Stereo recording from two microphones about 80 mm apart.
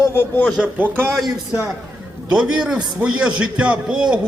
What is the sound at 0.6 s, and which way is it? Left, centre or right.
Speech, right.